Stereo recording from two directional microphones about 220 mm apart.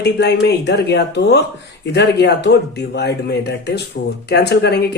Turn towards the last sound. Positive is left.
turn(degrees=50)  # may be behind; listen again after turning